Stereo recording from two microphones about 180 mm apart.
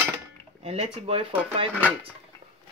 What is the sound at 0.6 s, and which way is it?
Speech, 35° right (ahead or behind).